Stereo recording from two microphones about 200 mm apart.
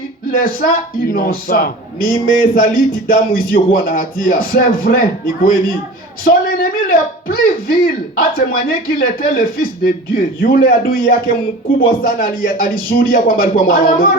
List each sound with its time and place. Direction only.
0.3 s a man's voice: 45° left (ahead or behind)